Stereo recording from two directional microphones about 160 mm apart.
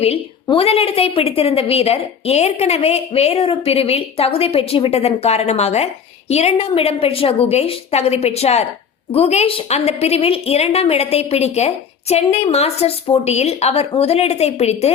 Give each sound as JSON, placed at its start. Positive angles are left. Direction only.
{"t": 0.4, "sound": "a woman's voice", "side_deg": 35}